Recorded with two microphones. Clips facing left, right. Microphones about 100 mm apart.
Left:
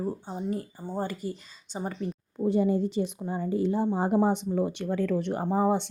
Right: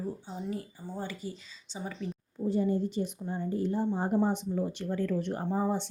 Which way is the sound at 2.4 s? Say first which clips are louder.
Left 4 dB; 90° left.